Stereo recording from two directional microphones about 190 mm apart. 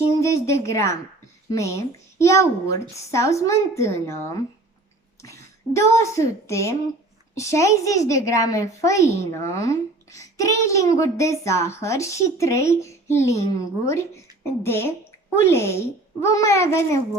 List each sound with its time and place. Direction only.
0.2 s a woman's voice: 15° left (ahead or behind)